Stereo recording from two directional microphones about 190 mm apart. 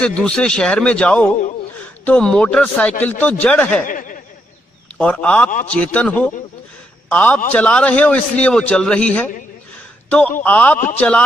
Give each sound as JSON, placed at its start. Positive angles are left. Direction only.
{"t": 0.0, "sound": "a man's voice", "side_deg": 5}
{"t": 3.8, "sound": "snicker", "side_deg": 45}
{"t": 4.9, "sound": "a man's voice", "side_deg": 5}